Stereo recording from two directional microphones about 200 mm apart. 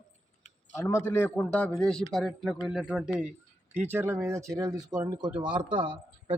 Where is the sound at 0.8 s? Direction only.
15° left (ahead or behind); by 6.3 s 25° right (ahead or behind).